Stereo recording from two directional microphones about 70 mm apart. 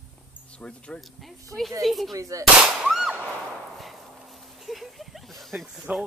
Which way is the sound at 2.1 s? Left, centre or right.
Right.